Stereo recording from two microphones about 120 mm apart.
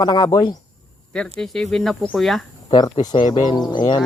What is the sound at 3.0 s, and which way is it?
Speech, 35° left (ahead or behind).